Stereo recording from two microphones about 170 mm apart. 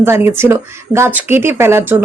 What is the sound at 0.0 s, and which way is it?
Speech, 15° right (ahead or behind).